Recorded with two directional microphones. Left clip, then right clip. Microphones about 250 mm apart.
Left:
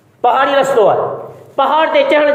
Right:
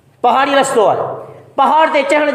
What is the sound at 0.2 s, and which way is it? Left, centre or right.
A man's voice, right.